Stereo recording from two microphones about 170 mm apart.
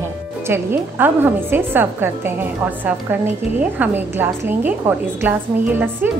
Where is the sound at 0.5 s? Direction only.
15° right (ahead or behind).